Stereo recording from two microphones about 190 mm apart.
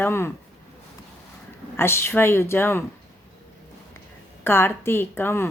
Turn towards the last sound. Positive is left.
turn(degrees=10)  # may be behind; listen again after turning